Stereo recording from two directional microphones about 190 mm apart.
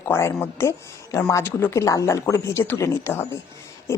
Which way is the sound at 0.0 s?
15° left (ahead or behind).